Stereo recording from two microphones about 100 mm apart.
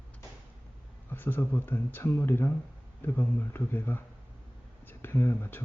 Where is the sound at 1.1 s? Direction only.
20° left (ahead or behind).